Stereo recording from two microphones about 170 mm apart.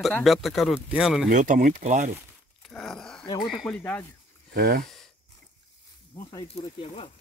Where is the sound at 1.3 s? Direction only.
50° right (ahead or behind).